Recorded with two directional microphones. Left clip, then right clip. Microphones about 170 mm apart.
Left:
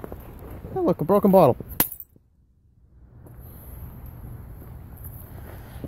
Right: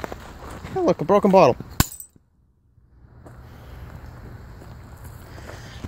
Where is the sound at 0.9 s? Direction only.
15° left (ahead or behind).